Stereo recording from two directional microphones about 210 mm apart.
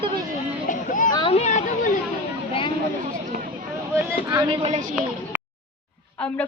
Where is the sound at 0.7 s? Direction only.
40° left (ahead or behind).